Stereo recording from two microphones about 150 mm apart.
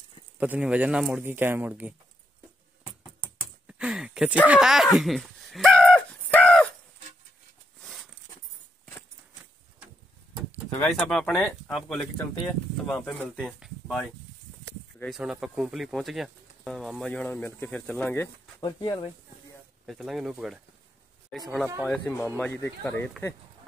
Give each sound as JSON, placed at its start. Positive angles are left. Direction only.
{"t": 0.4, "sound": "speech", "side_deg": -10}
{"t": 3.6, "sound": "a sound", "side_deg": -5}
{"t": 4.5, "sound": "speech", "side_deg": 0}
{"t": 6.3, "sound": "a sound", "side_deg": 5}
{"t": 7.8, "sound": "a sound", "side_deg": 0}
{"t": 10.7, "sound": "speech", "side_deg": 5}
{"t": 18.6, "sound": "speech", "side_deg": 25}
{"t": 19.9, "sound": "speech", "side_deg": 0}
{"t": 21.8, "sound": "speech", "side_deg": 15}